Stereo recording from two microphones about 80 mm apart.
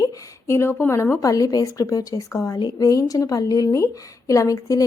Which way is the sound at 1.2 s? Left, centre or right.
Left.